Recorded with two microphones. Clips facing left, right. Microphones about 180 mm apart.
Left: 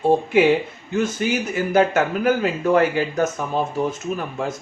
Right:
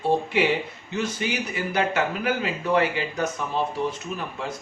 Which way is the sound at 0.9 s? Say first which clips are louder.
Left 6 dB; 50° left (ahead or behind).